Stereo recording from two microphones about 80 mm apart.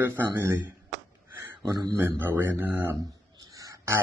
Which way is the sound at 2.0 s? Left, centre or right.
Right.